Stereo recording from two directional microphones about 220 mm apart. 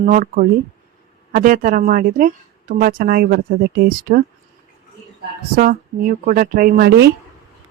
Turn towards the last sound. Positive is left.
turn(degrees=-45)  # may be behind; listen again after turning